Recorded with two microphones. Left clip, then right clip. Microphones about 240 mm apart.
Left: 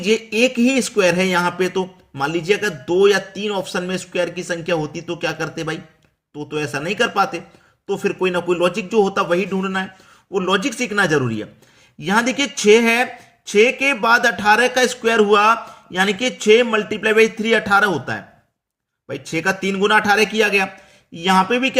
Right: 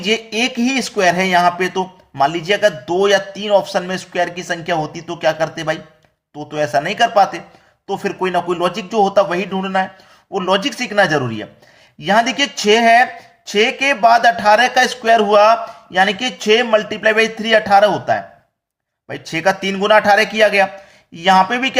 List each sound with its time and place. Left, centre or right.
0.0 s a man's voice: left
19.6 s a man's voice: centre